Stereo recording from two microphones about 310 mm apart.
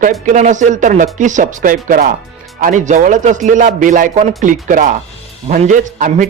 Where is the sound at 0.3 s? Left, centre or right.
Right.